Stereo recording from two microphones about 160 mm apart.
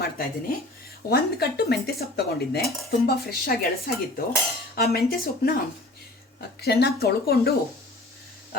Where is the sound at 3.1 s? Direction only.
70° left (ahead or behind).